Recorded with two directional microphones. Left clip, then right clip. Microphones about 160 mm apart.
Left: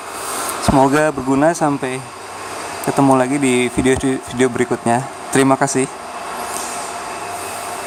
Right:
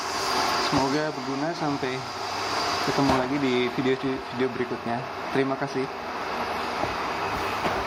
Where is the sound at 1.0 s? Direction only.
45° left (ahead or behind).